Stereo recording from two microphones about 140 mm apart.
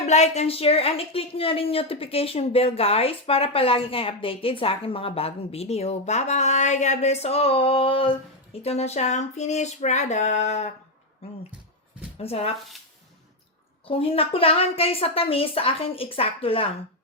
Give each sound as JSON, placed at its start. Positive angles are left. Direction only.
{"t": 0.0, "sound": "a woman's voice", "side_deg": 55}
{"t": 12.1, "sound": "speech", "side_deg": 45}
{"t": 13.8, "sound": "a woman's voice", "side_deg": 40}